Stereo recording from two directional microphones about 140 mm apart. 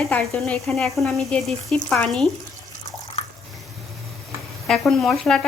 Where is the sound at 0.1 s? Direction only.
Centre (ahead or behind).